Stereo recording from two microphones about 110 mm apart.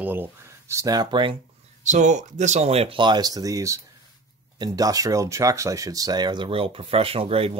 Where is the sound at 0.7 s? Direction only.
35° right (ahead or behind).